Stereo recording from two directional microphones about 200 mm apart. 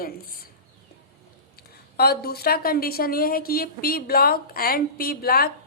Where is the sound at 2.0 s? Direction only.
50° left (ahead or behind).